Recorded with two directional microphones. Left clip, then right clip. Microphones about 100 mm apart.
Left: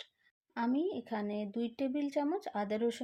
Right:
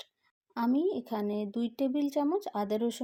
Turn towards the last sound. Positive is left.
turn(degrees=-35)  # may be behind; listen again after turning